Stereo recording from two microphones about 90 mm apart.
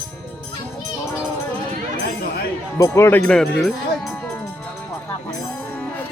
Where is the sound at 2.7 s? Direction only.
35° left (ahead or behind).